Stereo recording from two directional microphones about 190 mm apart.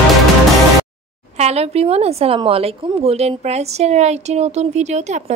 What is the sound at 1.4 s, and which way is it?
A woman's voice, 35° right (ahead or behind).